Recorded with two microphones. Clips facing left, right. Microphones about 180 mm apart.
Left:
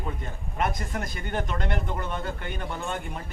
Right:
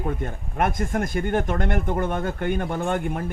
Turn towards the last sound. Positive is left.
turn(degrees=-55)  # may be behind; listen again after turning